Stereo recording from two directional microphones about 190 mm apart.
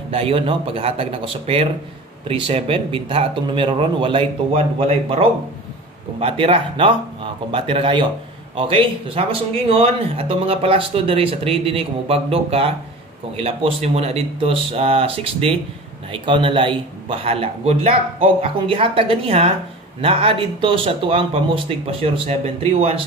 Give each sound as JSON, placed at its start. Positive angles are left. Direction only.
{"t": 0.1, "sound": "speech", "side_deg": -30}